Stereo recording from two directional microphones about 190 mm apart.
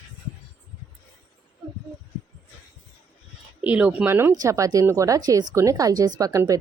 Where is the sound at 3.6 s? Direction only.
5° right (ahead or behind).